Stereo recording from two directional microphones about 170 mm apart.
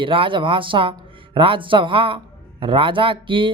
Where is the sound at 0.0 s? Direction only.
30° right (ahead or behind).